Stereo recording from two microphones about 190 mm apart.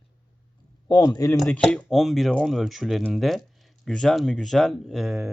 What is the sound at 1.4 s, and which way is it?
Speech, 5° left (ahead or behind).